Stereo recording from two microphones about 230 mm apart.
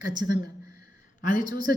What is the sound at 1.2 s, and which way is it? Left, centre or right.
Speech, left.